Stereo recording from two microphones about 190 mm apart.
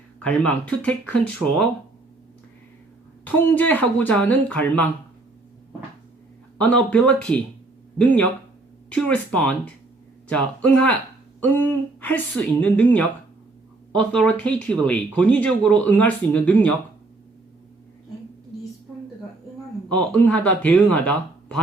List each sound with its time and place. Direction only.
0.2 s speech: 5° left (ahead or behind)
3.2 s speech: 10° left (ahead or behind)
6.6 s speech: 5° left (ahead or behind)
8.9 s speech: 5° left (ahead or behind)
20.1 s speech: 5° left (ahead or behind)